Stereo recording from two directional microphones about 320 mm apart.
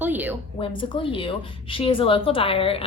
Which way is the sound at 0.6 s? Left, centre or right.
Centre.